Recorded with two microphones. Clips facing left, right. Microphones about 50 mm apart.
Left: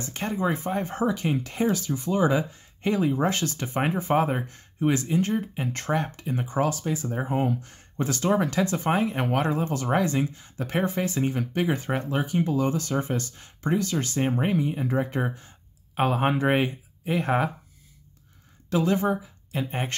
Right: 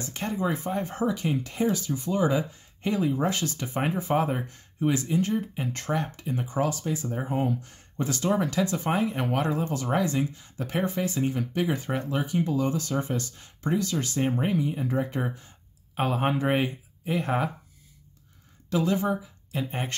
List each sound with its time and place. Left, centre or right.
0.3 s speech: left
0.9 s speech: left
1.7 s speech: left
6.4 s speech: left
7.2 s speech: left
18.7 s speech: left